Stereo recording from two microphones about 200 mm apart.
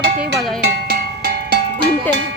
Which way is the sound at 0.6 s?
50° right (ahead or behind).